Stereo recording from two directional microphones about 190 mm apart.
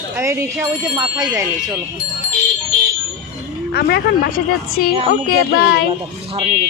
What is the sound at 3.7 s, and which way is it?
A woman's voice, 55° left (ahead or behind).